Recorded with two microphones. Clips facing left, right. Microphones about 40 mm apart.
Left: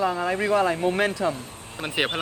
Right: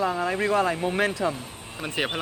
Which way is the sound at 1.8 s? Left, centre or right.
Left.